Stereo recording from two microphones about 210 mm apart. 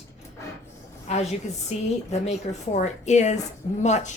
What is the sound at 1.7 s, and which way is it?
A woman's voice, 30° left (ahead or behind).